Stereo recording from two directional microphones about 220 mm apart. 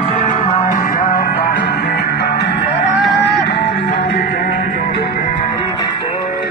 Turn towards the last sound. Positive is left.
turn(degrees=50)  # may be behind; listen again after turning